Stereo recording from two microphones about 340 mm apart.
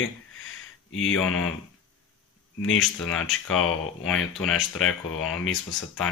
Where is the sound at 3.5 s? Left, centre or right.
Left.